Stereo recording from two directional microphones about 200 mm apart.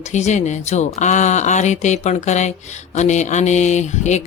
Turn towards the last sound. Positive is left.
turn(degrees=35)  # may be behind; listen again after turning